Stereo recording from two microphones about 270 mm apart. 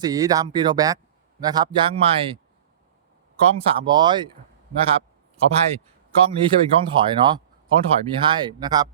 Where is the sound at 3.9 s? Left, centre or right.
Centre.